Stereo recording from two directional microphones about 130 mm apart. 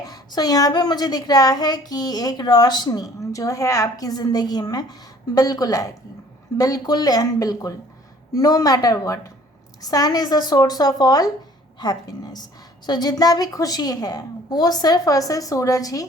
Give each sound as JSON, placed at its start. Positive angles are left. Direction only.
{"t": 0.0, "sound": "a woman's voice", "side_deg": 30}